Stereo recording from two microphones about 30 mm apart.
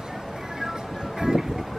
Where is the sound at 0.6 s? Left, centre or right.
Centre.